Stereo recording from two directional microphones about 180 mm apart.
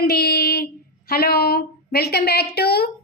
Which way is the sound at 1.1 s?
60° left (ahead or behind).